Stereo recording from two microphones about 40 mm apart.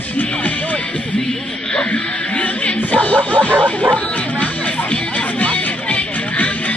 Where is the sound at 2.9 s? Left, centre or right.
Left.